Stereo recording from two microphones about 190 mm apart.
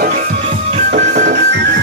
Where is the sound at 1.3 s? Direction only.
65° right (ahead or behind).